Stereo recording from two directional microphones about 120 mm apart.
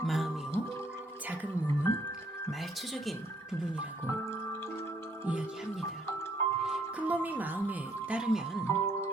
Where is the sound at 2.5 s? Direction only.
Centre (ahead or behind).